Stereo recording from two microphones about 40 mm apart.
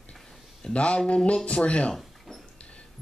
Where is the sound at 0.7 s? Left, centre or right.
Left.